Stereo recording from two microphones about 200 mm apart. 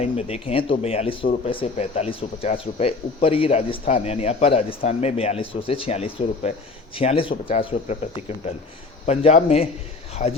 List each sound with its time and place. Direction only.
0.0 s a man's voice: 30° left (ahead or behind)
10.2 s speech: 45° left (ahead or behind)